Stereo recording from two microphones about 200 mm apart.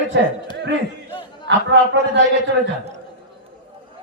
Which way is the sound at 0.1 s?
60° right (ahead or behind).